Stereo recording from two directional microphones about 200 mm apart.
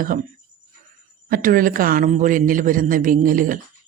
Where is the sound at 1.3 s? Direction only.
45° right (ahead or behind).